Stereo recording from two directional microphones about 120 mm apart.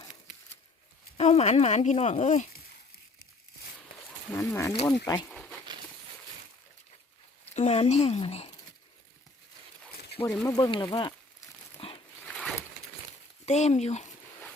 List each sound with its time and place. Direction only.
1.1 s speech: 65° left (ahead or behind); by 2.5 s 80° left
4.4 s speech: 25° left (ahead or behind)
5.3 s a sound: 10° left (ahead or behind)
7.5 s speech: 70° left (ahead or behind)
10.2 s speech: 25° left (ahead or behind)
10.6 s speech: 40° left (ahead or behind)
11.8 s dog: 50° left (ahead or behind)
12.2 s a sound: 5° left (ahead or behind)
13.4 s speech: 70° left (ahead or behind)